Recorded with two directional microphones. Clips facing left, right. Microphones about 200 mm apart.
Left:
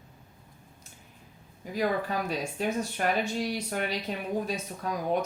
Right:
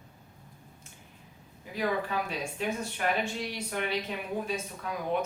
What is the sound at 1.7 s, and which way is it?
Speech, 40° left (ahead or behind).